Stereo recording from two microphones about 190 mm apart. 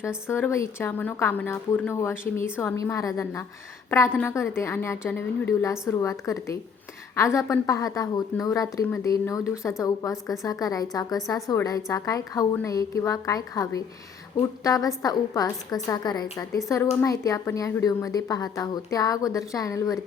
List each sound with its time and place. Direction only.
0.3 s a woman's voice: 15° left (ahead or behind)